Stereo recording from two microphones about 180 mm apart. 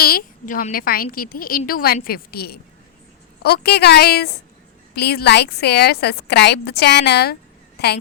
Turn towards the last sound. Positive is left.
turn(degrees=65)  # may be behind; listen again after turning